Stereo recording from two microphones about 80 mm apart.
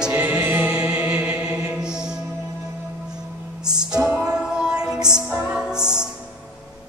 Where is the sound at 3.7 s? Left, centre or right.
Centre.